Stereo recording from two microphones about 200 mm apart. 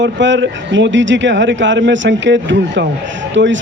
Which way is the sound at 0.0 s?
65° right (ahead or behind).